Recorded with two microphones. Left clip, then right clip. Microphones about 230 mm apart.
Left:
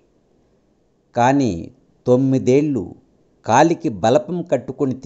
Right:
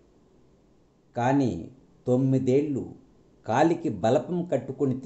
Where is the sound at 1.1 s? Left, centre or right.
Left.